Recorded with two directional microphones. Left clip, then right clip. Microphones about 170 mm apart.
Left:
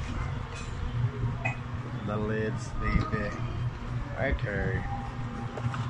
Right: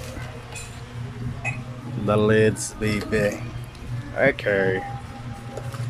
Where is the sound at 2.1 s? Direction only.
70° right (ahead or behind).